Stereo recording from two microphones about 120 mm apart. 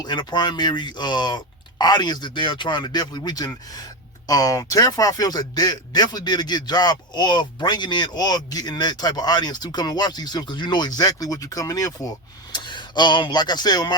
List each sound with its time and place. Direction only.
0.0 s speech: 35° left (ahead or behind)